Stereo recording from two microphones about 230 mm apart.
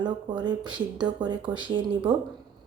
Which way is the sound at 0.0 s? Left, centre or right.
Centre.